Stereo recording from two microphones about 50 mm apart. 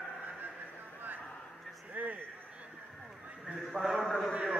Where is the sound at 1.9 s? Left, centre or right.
Right.